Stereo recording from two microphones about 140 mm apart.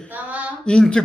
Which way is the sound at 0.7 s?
5° left (ahead or behind).